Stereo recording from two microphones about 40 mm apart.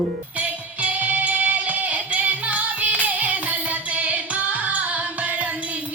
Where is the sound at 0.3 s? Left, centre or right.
Right.